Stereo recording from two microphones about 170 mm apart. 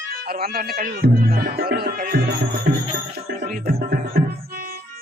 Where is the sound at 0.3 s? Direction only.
65° right (ahead or behind).